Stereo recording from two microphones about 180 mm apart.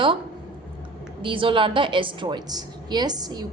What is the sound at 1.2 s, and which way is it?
A woman's voice, 30° right (ahead or behind).